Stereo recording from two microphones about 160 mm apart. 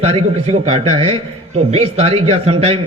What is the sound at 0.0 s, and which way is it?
A man's voice, 40° right (ahead or behind).